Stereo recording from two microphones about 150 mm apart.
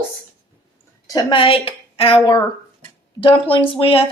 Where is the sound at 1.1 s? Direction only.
35° left (ahead or behind).